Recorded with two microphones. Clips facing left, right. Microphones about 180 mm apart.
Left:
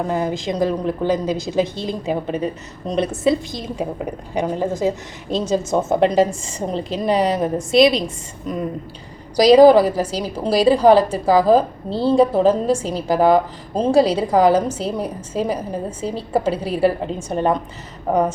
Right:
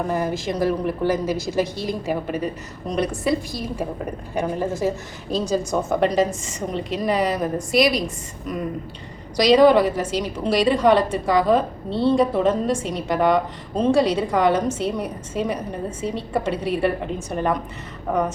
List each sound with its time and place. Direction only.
0.1 s a woman's voice: 15° left (ahead or behind)
9.3 s a woman's voice: 35° left (ahead or behind)